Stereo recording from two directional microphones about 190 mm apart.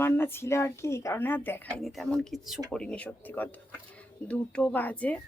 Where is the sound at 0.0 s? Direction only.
10° left (ahead or behind).